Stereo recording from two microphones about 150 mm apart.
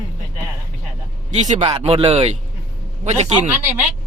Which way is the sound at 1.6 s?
40° right (ahead or behind).